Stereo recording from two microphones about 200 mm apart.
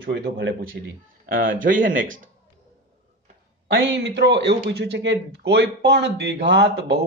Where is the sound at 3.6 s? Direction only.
65° right (ahead or behind).